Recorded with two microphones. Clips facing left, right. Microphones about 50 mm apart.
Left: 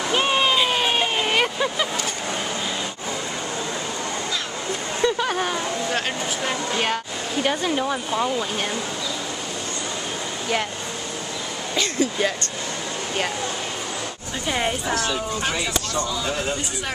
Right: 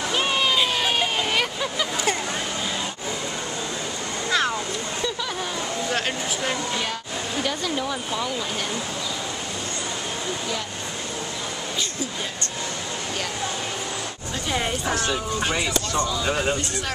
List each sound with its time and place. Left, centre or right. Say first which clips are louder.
0.1 s a sound: left 3 dB; left
0.7 s vehicle: left 2 dB; left
5.0 s a sound: left 10 dB; left
5.9 s speech: left 1 dB; centre
7.4 s speech: left 6 dB; left
11.7 s speech: left 10 dB; left
14.5 s speech: left 2 dB; centre
16.3 s speech: right 2 dB; centre